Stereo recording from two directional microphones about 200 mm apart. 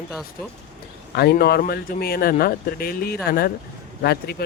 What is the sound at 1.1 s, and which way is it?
Speech, 50° left (ahead or behind).